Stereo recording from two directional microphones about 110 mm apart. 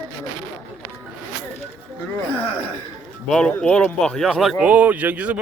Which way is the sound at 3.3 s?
5° left (ahead or behind).